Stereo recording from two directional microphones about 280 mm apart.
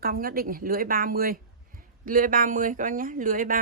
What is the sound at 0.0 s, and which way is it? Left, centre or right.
A woman's voice, right.